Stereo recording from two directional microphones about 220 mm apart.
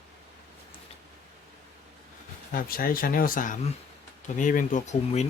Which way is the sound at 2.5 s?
40° left (ahead or behind).